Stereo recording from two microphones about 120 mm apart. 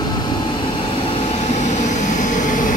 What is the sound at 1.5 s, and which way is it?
Vehicle, 80° left.